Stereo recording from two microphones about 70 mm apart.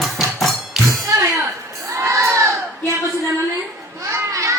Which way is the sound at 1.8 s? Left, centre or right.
Right.